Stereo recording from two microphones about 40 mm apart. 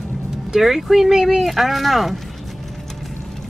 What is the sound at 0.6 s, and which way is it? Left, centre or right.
Speech, centre.